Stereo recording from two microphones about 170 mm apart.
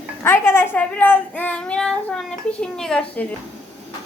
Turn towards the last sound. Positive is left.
turn(degrees=5)  # may be behind; listen again after turning